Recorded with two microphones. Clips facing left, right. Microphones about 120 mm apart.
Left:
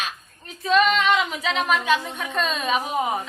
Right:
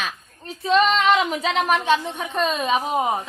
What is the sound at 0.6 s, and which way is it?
Speech, 30° right (ahead or behind).